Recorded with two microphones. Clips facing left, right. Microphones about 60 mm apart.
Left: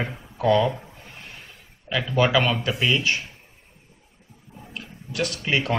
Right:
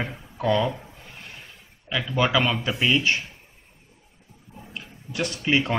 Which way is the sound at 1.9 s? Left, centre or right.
Centre.